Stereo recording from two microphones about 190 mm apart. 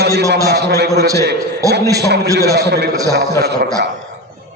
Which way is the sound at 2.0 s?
60° right (ahead or behind).